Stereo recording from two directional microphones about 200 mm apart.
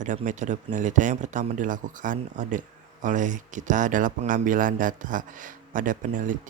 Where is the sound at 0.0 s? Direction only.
40° right (ahead or behind).